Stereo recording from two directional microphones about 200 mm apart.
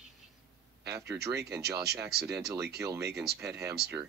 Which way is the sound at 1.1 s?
15° right (ahead or behind).